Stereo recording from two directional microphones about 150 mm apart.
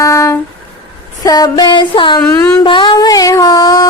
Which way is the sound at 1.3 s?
25° left (ahead or behind).